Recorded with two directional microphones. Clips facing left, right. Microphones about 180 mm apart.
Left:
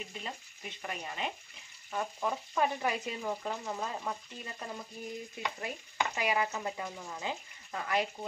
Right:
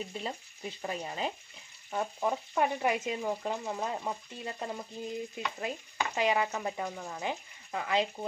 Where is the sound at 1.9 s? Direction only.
20° right (ahead or behind).